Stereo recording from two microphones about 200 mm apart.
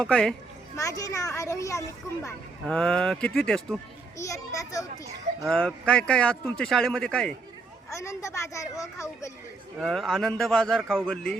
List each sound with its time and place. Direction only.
0.0 s a man's voice: 5° left (ahead or behind)
0.8 s a woman's voice: 15° left (ahead or behind)
2.2 s a man's voice: 5° left (ahead or behind)
4.2 s a woman's voice: 15° left (ahead or behind)
5.4 s a man's voice: centre (ahead or behind)
7.9 s a woman's voice: 15° left (ahead or behind)
9.7 s a man's voice: centre (ahead or behind)